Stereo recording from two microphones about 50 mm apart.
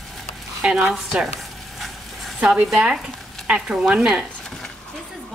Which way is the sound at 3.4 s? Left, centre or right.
Right.